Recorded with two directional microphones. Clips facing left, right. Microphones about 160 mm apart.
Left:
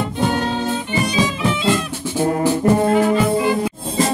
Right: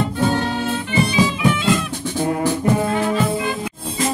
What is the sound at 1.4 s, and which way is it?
Music, 25° left (ahead or behind).